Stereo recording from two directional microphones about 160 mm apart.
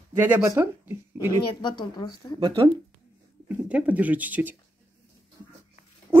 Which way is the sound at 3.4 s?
10° right (ahead or behind).